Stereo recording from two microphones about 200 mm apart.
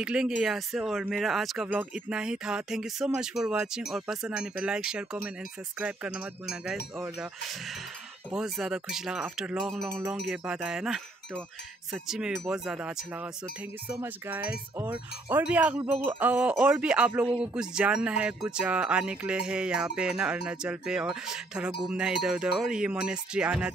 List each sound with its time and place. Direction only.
0.0 s speech: 5° right (ahead or behind)
13.8 s wind chime: 10° right (ahead or behind)
17.4 s speech: 5° right (ahead or behind)